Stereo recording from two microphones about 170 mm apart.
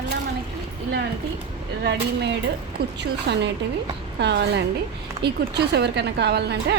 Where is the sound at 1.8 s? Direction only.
90° right; by 6.8 s 75° right (ahead or behind).